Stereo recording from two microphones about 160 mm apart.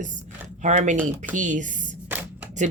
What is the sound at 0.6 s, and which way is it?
Speech, 50° right (ahead or behind).